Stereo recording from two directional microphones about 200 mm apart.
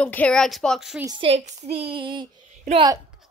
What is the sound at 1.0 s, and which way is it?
Speech, 25° right (ahead or behind).